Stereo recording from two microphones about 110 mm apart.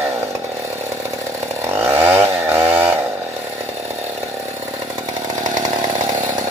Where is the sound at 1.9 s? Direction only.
20° right (ahead or behind).